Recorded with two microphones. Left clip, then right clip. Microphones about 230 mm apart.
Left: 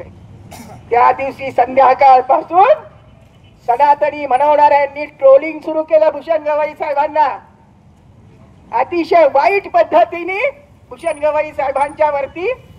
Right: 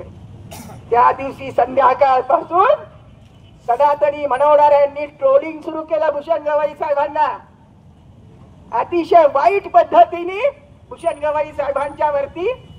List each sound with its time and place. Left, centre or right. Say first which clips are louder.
0.5 s vehicle: left 1 dB; right
0.8 s a woman's voice: left 2 dB; left
8.6 s a woman's voice: left 2 dB; left